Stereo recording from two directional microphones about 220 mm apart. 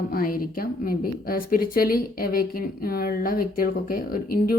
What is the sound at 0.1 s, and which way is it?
A woman's voice, 40° left (ahead or behind).